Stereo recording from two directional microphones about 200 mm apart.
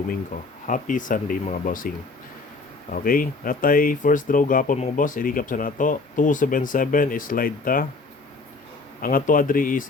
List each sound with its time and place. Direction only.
0.7 s speech: 40° left (ahead or behind)
2.9 s speech: 45° left (ahead or behind)
9.0 s speech: 45° left (ahead or behind)